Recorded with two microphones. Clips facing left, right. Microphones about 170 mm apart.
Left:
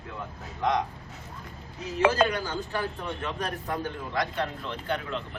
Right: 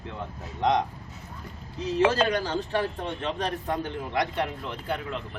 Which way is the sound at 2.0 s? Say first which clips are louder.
Even; 30° right (ahead or behind).